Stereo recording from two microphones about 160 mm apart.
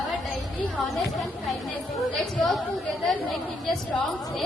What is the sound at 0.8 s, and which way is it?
A woman's voice, centre (ahead or behind).